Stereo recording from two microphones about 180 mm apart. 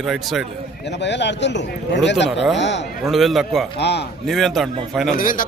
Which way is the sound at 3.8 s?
65° left (ahead or behind).